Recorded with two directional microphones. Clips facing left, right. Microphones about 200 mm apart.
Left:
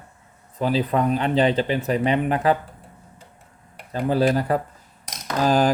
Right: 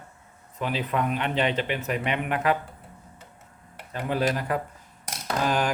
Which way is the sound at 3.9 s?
35° left (ahead or behind).